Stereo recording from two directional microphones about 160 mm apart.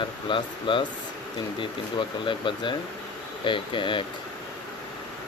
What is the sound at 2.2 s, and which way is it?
Speech, 30° left (ahead or behind).